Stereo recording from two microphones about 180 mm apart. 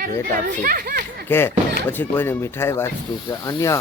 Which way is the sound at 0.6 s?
55° right (ahead or behind).